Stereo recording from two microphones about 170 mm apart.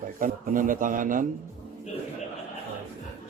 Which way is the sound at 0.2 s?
50° right (ahead or behind).